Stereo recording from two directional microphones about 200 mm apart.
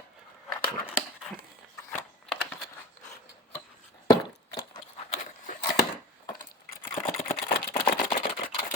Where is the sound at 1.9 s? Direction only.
Centre (ahead or behind).